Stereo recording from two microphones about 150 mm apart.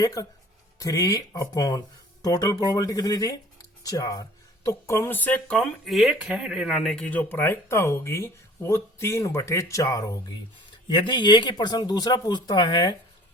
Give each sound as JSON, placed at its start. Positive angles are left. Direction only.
{"t": 0.0, "sound": "speech", "side_deg": 25}